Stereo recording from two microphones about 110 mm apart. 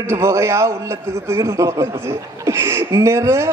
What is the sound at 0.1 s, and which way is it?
A man's voice, 25° right (ahead or behind).